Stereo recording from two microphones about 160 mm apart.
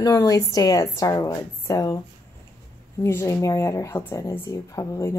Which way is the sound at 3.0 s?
15° left (ahead or behind).